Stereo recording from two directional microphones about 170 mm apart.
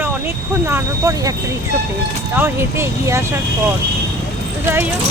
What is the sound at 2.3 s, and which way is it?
Speech, 15° right (ahead or behind).